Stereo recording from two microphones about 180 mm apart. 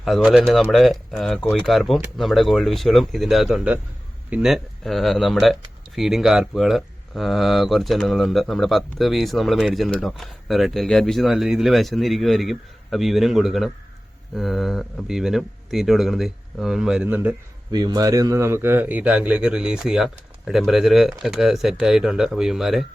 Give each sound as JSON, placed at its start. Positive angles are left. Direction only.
{"t": 0.0, "sound": "speech", "side_deg": 0}
{"t": 17.7, "sound": "a man's voice", "side_deg": -20}